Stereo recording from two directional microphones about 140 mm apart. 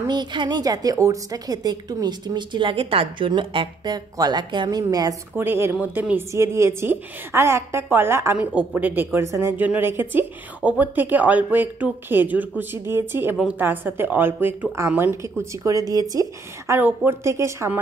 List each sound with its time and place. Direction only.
0.1 s a woman's voice: 35° right (ahead or behind)
5.3 s a woman's voice: 15° right (ahead or behind)